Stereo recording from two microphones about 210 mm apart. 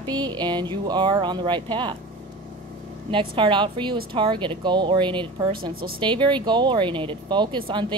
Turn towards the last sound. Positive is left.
turn(degrees=-20)  # may be behind; listen again after turning